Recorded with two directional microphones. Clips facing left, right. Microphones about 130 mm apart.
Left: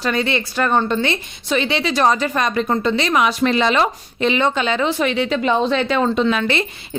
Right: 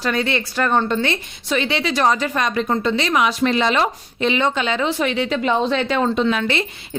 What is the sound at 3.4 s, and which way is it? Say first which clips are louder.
Speech: left 1 dB; 80° left.